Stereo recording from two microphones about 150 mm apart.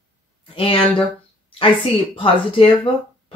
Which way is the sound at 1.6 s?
35° left (ahead or behind).